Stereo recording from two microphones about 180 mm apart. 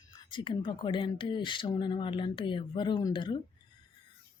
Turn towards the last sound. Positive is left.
turn(degrees=25)  # may be behind; listen again after turning